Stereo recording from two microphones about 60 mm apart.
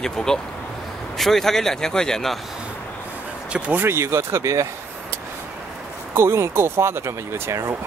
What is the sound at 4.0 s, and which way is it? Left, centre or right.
Speech, right.